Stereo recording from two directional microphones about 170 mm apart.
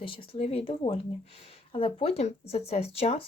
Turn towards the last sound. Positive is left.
turn(degrees=35)  # may be behind; listen again after turning